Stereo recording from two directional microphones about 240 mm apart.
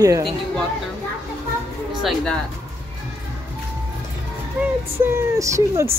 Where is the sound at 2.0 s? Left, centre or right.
Centre.